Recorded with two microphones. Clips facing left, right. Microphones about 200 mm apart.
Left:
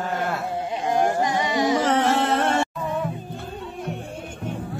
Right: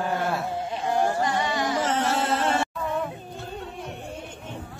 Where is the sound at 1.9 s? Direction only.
65° left (ahead or behind).